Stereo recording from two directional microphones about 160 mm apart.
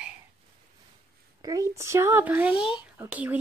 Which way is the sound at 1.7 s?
15° right (ahead or behind).